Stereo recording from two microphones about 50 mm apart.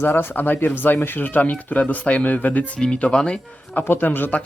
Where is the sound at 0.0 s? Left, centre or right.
Left.